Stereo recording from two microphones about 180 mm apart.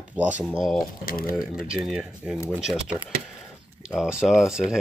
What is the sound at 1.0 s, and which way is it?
Speech, 55° left (ahead or behind).